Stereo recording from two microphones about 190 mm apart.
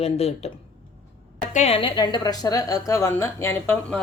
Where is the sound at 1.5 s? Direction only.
30° left (ahead or behind).